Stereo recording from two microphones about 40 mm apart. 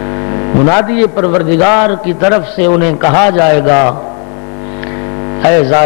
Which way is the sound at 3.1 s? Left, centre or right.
Right.